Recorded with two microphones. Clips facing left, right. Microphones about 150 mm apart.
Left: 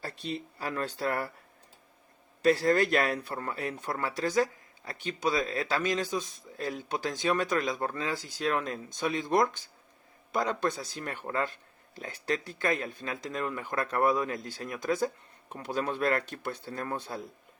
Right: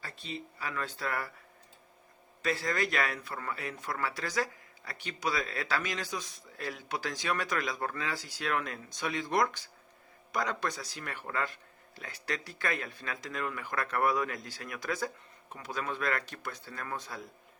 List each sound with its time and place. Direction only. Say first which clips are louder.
0.6 s speech: left 5 dB; 35° left (ahead or behind)
2.4 s speech: left 8 dB; 35° left (ahead or behind)
5.5 s speech: left 5 dB; 25° left (ahead or behind)